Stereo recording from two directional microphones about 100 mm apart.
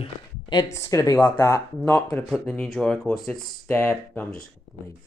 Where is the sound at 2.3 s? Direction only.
Centre (ahead or behind).